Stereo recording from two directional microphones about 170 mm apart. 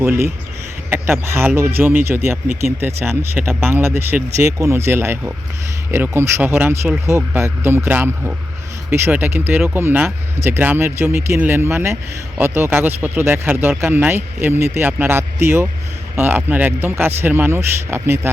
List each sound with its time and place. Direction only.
0.0 s speech: 15° right (ahead or behind)